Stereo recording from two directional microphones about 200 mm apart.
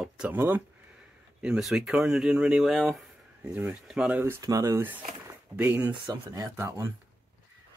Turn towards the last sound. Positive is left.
turn(degrees=-10)  # may be behind; listen again after turning